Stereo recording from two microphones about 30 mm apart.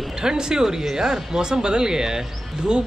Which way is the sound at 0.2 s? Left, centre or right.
Right.